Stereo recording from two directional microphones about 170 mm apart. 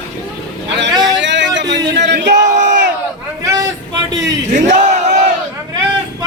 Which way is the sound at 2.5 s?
45° right (ahead or behind).